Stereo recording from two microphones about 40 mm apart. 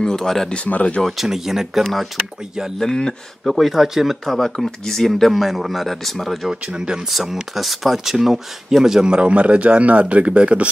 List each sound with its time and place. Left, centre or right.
0.0 s speech: centre
1.0 s speech: centre
2.8 s speech: centre
3.5 s speech: centre
4.4 s speech: centre
5.3 s speech: centre
6.5 s speech: centre
7.1 s speech: centre
9.0 s speech: right